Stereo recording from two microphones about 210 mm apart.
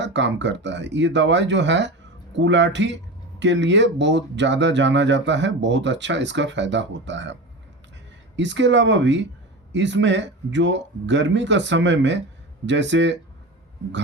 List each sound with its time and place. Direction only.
0.0 s speech: 60° right (ahead or behind)
8.4 s speech: 60° right (ahead or behind)